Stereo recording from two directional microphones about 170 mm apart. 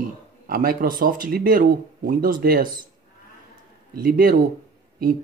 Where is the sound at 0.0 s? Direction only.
55° right (ahead or behind).